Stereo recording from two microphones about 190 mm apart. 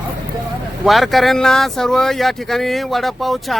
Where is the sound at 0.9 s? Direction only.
Centre (ahead or behind).